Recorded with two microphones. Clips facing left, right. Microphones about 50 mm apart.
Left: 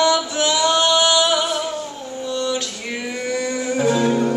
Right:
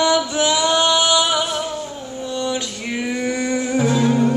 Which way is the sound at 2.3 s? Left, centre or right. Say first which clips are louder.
Left 1 dB; centre.